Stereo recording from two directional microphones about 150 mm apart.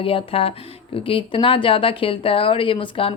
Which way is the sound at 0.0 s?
35° left (ahead or behind).